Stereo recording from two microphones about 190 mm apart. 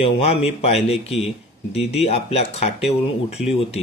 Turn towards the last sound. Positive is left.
turn(degrees=30)  # may be behind; listen again after turning